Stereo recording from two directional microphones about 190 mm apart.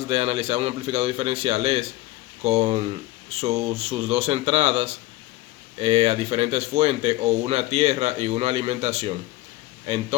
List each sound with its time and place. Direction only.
0.1 s speech: 30° right (ahead or behind)